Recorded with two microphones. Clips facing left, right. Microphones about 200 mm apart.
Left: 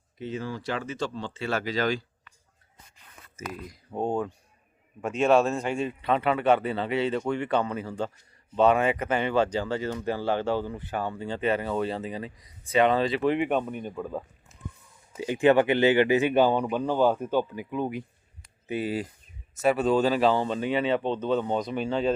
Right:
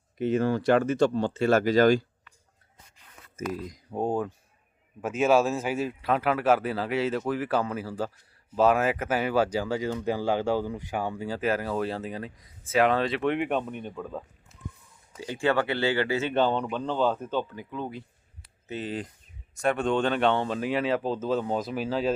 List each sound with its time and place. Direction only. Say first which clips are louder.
0.2 s speech: right 9 dB; 60° right (ahead or behind)
3.9 s a man's voice: even; 5° right (ahead or behind)